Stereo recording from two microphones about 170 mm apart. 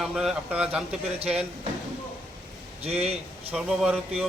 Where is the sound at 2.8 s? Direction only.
35° right (ahead or behind).